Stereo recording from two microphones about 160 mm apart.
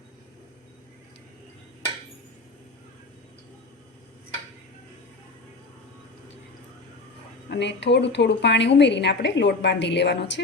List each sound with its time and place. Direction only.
7.5 s a woman's voice: 90° left